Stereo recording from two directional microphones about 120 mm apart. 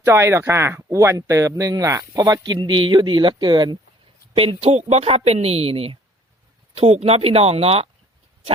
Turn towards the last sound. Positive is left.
turn(degrees=-55)  # may be behind; listen again after turning